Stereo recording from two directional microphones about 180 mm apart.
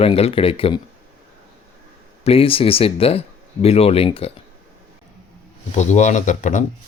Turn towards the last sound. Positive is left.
turn(degrees=45)  # may be behind; listen again after turning